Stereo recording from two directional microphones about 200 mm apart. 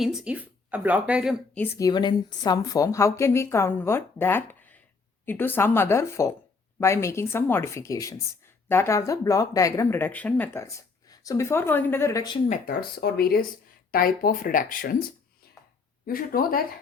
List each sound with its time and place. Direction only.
0.0 s speech: centre (ahead or behind)
1.5 s speech: 10° left (ahead or behind)
12.5 s speech: 50° left (ahead or behind)
16.0 s speech: 45° left (ahead or behind)